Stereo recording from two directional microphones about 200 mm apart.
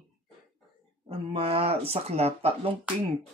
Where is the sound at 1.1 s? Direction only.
30° right (ahead or behind).